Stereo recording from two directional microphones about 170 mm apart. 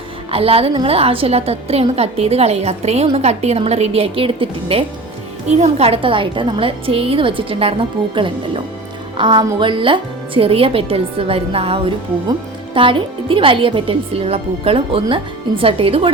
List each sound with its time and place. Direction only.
0.3 s a woman's voice: 35° right (ahead or behind)